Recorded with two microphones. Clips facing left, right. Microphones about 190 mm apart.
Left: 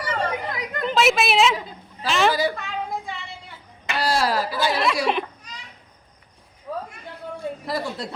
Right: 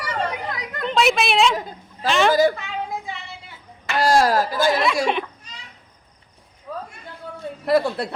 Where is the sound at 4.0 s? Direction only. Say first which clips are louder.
Right 5 dB; 45° right (ahead or behind).